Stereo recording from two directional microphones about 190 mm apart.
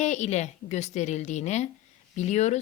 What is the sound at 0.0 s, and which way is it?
Speech, 40° left (ahead or behind).